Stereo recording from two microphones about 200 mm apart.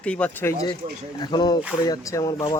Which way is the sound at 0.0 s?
5° left (ahead or behind).